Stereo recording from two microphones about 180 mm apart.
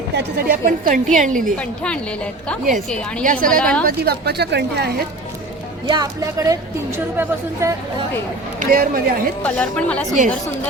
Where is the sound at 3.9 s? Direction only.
60° right (ahead or behind).